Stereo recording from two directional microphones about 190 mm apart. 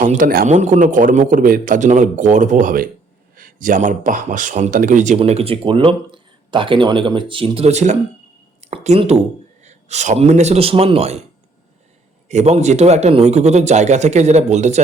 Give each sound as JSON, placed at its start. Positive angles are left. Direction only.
{"t": 0.0, "sound": "a man's voice", "side_deg": -45}
{"t": 12.3, "sound": "speech", "side_deg": -35}